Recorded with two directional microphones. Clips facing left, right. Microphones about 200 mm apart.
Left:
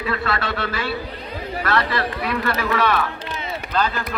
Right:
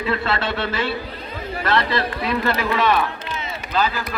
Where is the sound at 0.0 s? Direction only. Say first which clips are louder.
Right 2 dB; 25° right (ahead or behind).